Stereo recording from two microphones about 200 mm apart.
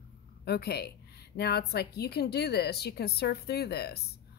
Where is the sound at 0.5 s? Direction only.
55° left (ahead or behind).